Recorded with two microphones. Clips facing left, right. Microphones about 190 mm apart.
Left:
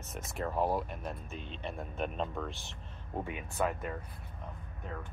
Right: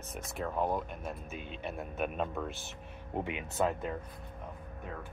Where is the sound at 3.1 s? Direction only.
20° right (ahead or behind).